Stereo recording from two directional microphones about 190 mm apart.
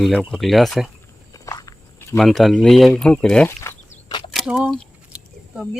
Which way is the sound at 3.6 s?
15° left (ahead or behind).